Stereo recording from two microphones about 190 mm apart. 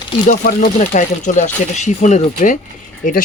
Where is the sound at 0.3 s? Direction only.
40° left (ahead or behind).